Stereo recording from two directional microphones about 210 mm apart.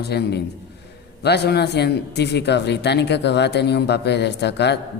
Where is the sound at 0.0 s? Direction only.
50° left (ahead or behind).